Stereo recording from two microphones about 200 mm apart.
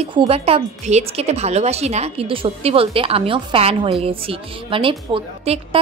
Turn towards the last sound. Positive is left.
turn(degrees=-25)  # may be behind; listen again after turning